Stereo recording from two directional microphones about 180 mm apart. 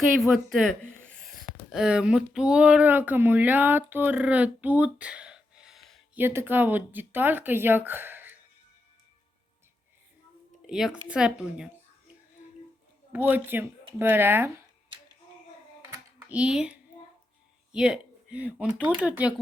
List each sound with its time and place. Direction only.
0.2 s speech: centre (ahead or behind)
6.1 s speech: 10° right (ahead or behind)
10.7 s speech: 5° right (ahead or behind)
12.4 s a sound: 40° left (ahead or behind)
13.1 s speech: 10° right (ahead or behind)
15.8 s computer keyboard: 10° right (ahead or behind)
17.7 s speech: 5° right (ahead or behind)